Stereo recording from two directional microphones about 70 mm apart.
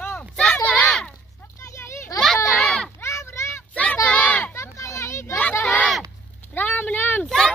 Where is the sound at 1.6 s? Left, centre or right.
Left.